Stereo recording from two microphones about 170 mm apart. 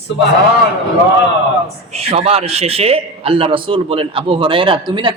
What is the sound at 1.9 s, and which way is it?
A man's voice, 35° right (ahead or behind).